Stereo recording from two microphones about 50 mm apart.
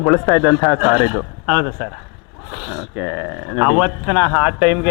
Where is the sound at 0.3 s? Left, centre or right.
Centre.